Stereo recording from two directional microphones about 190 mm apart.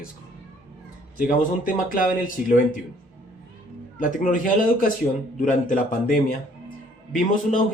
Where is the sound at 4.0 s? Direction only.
45° left (ahead or behind).